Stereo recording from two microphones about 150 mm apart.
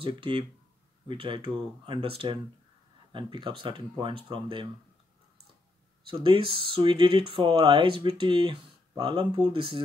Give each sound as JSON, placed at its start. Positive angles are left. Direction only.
{"t": 0.0, "sound": "speech", "side_deg": -35}
{"t": 6.0, "sound": "speech", "side_deg": -35}